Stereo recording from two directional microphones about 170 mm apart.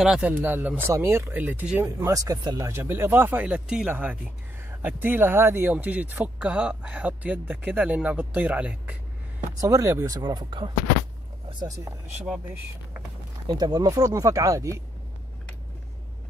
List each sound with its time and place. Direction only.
0.0 s speech: 5° right (ahead or behind)
9.6 s speech: 20° right (ahead or behind)
13.5 s speech: 25° right (ahead or behind)